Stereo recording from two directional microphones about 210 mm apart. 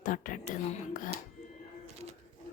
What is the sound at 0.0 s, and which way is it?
Speech, 40° left (ahead or behind).